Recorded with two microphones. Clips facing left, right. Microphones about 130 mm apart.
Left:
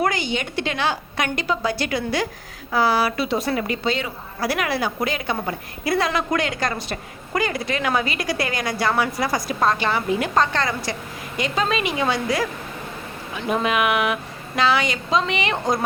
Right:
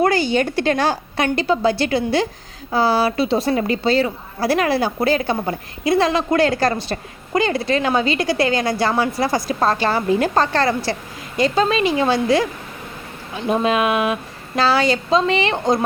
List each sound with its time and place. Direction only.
0.0 s a woman's voice: 35° right (ahead or behind)
13.5 s a woman's voice: 30° right (ahead or behind)